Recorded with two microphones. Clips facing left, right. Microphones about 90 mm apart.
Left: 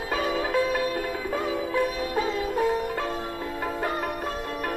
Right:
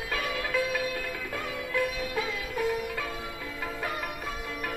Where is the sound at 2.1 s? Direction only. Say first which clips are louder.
Left 6 dB; 40° left (ahead or behind).